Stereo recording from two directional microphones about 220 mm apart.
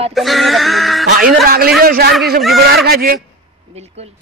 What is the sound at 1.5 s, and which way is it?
A man's voice, 45° right (ahead or behind).